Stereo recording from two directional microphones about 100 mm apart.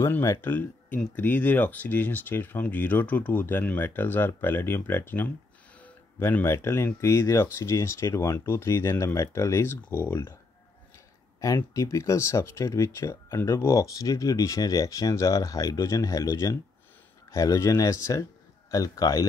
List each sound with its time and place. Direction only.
0.2 s speech: 25° left (ahead or behind)
11.4 s speech: 35° left (ahead or behind)